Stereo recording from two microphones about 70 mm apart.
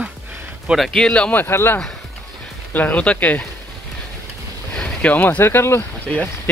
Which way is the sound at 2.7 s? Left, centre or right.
Left.